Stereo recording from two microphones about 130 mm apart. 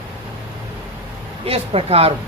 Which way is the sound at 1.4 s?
50° right (ahead or behind).